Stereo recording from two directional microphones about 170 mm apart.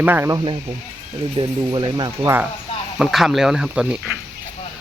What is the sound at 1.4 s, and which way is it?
Speech, 25° right (ahead or behind).